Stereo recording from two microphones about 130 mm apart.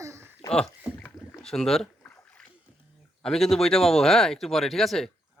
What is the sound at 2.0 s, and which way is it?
Splash, 15° left (ahead or behind).